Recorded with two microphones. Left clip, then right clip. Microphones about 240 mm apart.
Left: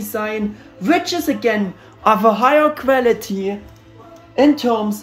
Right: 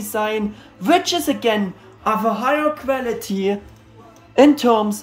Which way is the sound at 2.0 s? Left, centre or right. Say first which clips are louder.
Left 6 dB; centre.